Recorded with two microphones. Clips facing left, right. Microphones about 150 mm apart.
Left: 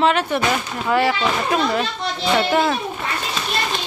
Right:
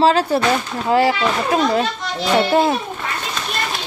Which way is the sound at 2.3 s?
25° right (ahead or behind).